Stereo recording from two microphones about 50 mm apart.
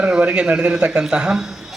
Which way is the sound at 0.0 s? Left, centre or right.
Right.